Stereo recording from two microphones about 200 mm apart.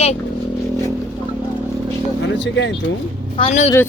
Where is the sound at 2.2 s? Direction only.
65° left (ahead or behind).